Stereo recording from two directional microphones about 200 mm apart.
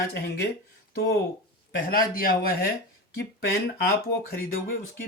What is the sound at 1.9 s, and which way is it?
Speech, 45° left (ahead or behind).